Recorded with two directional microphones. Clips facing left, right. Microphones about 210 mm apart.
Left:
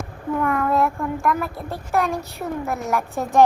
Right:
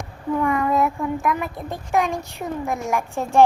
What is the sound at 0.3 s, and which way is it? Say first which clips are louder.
Speech: even; centre (ahead or behind).